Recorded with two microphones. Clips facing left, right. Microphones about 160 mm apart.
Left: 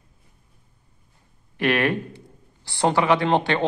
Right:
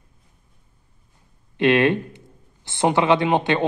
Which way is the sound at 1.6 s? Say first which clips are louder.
Right 4 dB; 25° right (ahead or behind).